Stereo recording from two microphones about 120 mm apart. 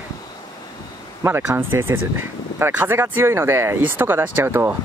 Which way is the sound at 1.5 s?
20° right (ahead or behind).